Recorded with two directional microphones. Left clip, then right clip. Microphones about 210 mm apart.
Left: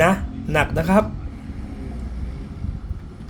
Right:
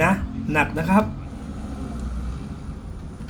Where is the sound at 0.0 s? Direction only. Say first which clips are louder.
Left 3 dB; 50° left (ahead or behind).